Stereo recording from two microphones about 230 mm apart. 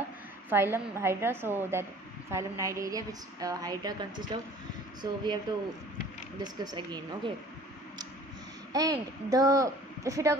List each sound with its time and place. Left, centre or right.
0.5 s a woman's voice: centre
8.7 s a woman's voice: centre